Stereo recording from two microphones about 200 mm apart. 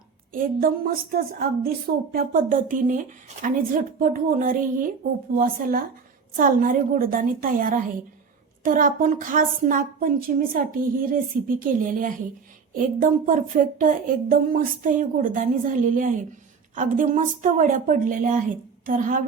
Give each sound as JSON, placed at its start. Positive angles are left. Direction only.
{"t": 1.1, "sound": "a woman's voice", "side_deg": -45}